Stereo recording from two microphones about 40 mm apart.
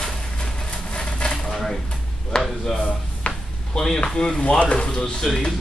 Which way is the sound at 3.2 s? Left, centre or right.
Left.